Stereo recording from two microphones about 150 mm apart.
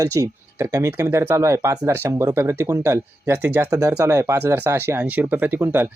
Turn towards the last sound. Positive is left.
turn(degrees=-15)  # may be behind; listen again after turning